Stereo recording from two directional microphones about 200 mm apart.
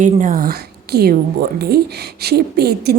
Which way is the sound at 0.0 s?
40° right (ahead or behind).